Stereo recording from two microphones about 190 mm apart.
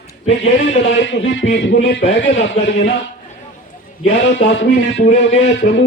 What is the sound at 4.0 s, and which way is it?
Speech, 75° left (ahead or behind).